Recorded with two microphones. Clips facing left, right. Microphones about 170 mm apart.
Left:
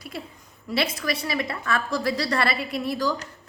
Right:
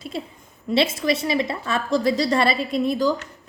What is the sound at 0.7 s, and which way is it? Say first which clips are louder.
A woman's voice: right 6 dB; 25° right (ahead or behind).